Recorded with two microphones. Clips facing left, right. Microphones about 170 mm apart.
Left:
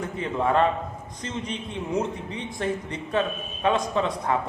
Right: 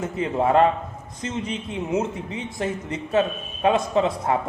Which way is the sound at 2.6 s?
25° right (ahead or behind).